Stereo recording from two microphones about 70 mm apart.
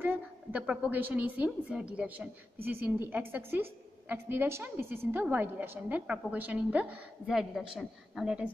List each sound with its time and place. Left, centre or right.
0.0 s a woman's voice: right
7.2 s a woman's voice: centre